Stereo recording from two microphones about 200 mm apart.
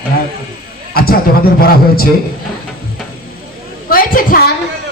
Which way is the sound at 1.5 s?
50° left (ahead or behind).